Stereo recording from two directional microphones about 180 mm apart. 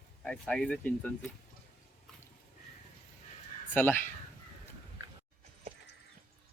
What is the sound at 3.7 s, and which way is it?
Speech, 10° left (ahead or behind).